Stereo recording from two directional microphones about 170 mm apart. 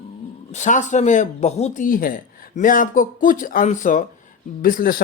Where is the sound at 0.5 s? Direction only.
45° left (ahead or behind).